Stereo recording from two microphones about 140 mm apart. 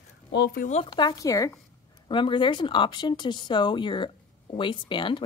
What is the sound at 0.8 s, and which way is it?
Speech, 35° left (ahead or behind).